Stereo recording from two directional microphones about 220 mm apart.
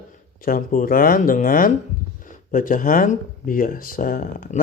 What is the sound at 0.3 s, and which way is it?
Speech, 40° left (ahead or behind).